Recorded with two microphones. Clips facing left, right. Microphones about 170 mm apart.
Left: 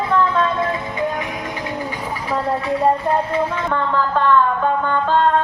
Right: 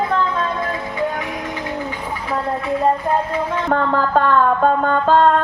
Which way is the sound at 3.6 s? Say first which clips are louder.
Right 2 dB; 45° right (ahead or behind).